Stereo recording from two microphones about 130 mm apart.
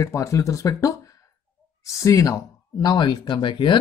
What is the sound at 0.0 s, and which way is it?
Speech, 25° left (ahead or behind).